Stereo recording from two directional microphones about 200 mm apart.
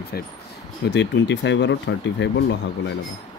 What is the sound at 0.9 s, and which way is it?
Speech, 60° left (ahead or behind).